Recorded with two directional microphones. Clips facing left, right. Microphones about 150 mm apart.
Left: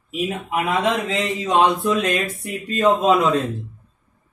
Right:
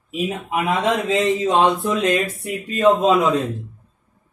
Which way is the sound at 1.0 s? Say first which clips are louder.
Right 5 dB; 20° right (ahead or behind).